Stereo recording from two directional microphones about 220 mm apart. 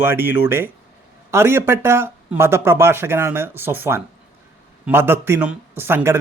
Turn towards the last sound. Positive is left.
turn(degrees=-10)  # may be behind; listen again after turning